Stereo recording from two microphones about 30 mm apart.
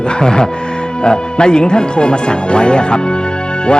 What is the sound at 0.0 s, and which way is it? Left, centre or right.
Speech, left.